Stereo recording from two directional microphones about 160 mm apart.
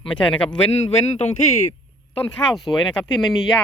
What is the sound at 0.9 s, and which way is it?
Speech, 45° left (ahead or behind).